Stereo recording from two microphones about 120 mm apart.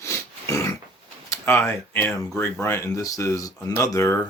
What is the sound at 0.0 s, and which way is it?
Dog, 25° left (ahead or behind).